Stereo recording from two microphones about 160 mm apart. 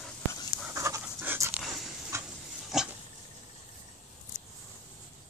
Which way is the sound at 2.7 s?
Centre (ahead or behind).